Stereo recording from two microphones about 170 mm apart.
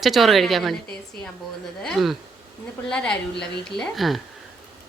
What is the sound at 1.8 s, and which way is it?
Speech, centre (ahead or behind).